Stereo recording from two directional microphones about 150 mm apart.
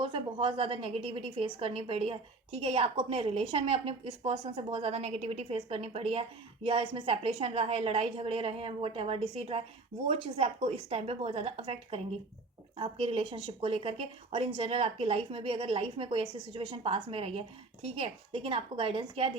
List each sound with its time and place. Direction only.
0.0 s a woman's voice: 35° right (ahead or behind)